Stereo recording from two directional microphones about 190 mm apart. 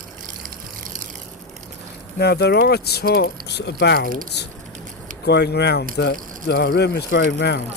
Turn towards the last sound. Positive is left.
turn(degrees=60)  # may be behind; listen again after turning